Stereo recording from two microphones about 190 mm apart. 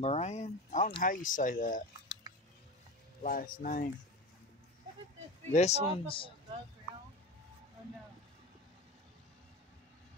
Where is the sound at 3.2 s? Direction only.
45° left (ahead or behind).